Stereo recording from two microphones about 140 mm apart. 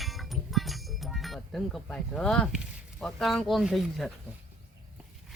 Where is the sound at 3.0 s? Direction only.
Centre (ahead or behind).